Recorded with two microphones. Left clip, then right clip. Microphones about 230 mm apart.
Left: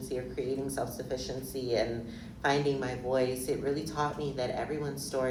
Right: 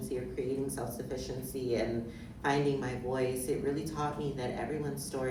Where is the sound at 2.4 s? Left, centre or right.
Left.